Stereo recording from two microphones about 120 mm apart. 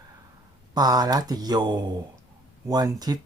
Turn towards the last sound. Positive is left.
turn(degrees=-35)  # may be behind; listen again after turning